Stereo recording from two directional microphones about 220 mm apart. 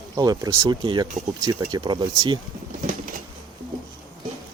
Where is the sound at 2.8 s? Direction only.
40° right (ahead or behind).